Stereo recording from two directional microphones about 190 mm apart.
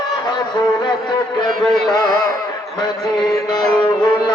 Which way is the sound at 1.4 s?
Centre (ahead or behind).